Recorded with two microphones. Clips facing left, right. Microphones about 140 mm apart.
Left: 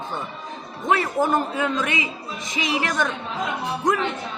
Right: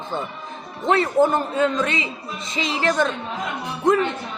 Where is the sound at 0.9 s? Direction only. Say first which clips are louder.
Right 3 dB; 25° right (ahead or behind).